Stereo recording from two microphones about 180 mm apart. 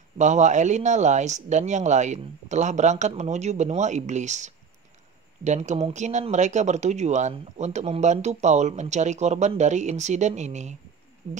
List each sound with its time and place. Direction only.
0.2 s speech: 40° right (ahead or behind)